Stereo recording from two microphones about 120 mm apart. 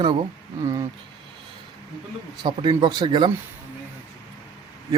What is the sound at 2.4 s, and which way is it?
Speech, 45° right (ahead or behind).